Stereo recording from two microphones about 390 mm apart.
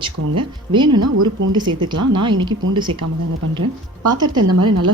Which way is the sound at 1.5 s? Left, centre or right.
Centre.